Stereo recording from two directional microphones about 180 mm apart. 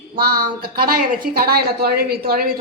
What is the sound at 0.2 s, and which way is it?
A woman's voice, 60° right (ahead or behind).